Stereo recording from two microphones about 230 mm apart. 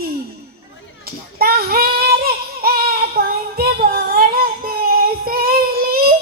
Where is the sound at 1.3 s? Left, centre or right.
Right.